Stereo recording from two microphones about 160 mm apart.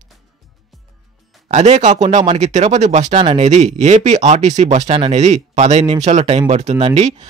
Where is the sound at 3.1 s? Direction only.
35° right (ahead or behind).